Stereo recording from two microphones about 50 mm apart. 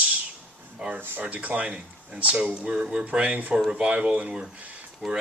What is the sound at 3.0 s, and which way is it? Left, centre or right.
Speech, right.